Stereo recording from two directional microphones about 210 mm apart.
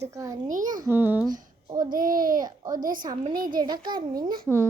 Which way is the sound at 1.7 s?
20° right (ahead or behind).